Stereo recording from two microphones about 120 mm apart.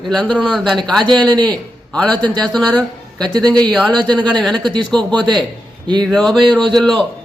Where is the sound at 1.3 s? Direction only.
35° right (ahead or behind).